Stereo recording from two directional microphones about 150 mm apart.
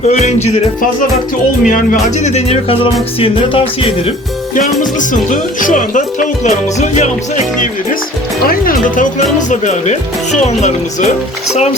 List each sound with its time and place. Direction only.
0.1 s speech: 50° left (ahead or behind)
4.5 s speech: 60° left (ahead or behind)
8.4 s speech: 70° left (ahead or behind); by 11.1 s 50° left (ahead or behind)